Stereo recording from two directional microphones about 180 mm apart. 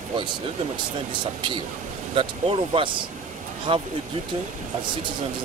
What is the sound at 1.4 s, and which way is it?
Speech, 25° right (ahead or behind).